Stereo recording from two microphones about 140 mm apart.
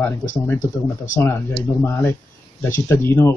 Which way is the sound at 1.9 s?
15° left (ahead or behind).